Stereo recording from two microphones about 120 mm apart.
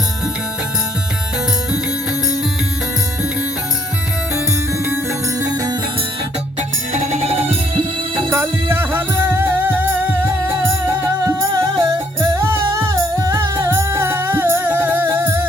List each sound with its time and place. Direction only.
5.4 s music: 30° right (ahead or behind)
6.6 s music: 70° right (ahead or behind)
8.3 s music: 20° right (ahead or behind)